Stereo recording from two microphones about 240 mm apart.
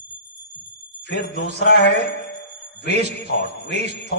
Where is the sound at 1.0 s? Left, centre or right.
Left.